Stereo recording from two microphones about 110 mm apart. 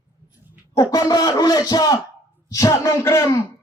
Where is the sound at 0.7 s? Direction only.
35° left (ahead or behind).